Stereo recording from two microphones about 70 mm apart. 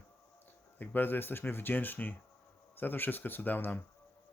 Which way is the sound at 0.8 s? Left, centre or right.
Left.